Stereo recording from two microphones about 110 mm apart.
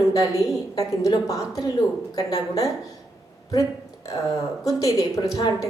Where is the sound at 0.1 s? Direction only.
35° left (ahead or behind).